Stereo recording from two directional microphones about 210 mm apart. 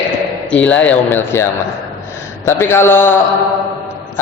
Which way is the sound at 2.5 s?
10° left (ahead or behind).